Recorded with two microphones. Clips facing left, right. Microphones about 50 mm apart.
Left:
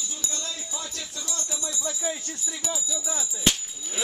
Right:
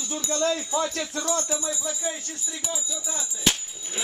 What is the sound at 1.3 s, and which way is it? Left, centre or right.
Music, right.